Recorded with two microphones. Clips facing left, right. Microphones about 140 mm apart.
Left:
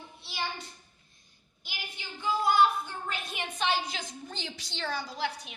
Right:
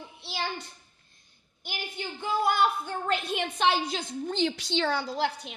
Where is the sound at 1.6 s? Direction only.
55° right (ahead or behind).